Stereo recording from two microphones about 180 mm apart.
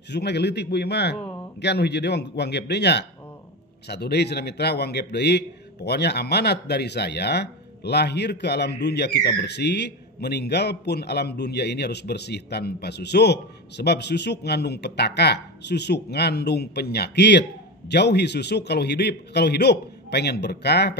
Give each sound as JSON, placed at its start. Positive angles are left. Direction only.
{"t": 0.1, "sound": "a man's voice", "side_deg": 70}